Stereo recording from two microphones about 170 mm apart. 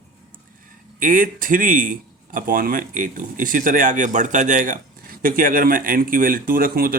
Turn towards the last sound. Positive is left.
turn(degrees=-60)  # may be behind; listen again after turning